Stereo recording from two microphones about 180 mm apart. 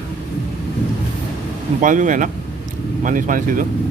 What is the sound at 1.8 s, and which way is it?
Speech, 45° right (ahead or behind).